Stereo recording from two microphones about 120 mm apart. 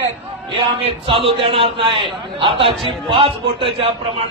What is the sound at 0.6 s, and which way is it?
A man's voice, 50° right (ahead or behind).